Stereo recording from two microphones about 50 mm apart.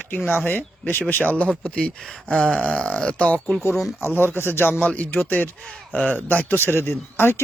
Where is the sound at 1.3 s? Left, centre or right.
Left.